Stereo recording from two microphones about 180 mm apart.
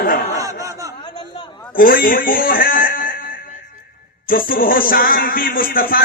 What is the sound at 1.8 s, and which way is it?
Speech, 50° left (ahead or behind).